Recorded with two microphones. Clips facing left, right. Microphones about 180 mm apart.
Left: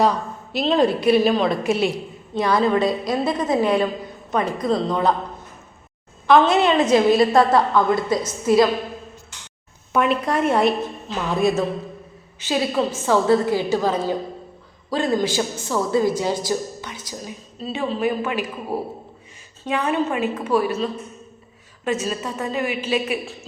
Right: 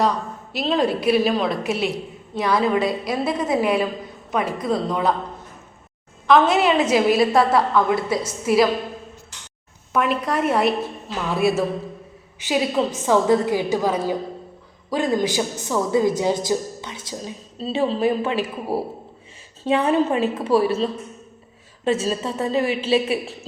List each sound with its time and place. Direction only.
0.5 s a woman's voice: centre (ahead or behind)
6.2 s a woman's voice: centre (ahead or behind)
9.9 s a woman's voice: centre (ahead or behind); by 18.5 s 30° right (ahead or behind)
19.6 s a woman's voice: 30° right (ahead or behind)